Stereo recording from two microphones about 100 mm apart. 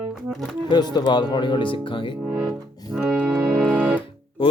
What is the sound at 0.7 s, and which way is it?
Music, 45° left (ahead or behind).